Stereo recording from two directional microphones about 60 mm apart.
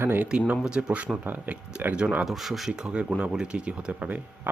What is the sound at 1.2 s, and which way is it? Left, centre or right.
Speech, right.